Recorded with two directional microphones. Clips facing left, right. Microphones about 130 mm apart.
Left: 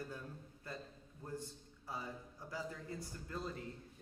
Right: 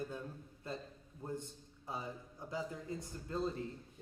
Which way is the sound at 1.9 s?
20° right (ahead or behind).